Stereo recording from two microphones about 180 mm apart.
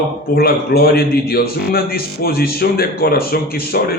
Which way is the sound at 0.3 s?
55° left (ahead or behind).